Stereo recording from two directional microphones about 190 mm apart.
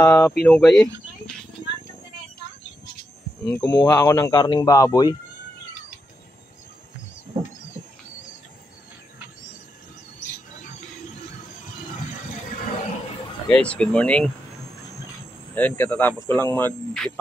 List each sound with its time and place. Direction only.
0.0 s speech: 10° left (ahead or behind)
3.4 s speech: 15° left (ahead or behind)
13.5 s speech: 5° left (ahead or behind)
15.5 s speech: 10° left (ahead or behind)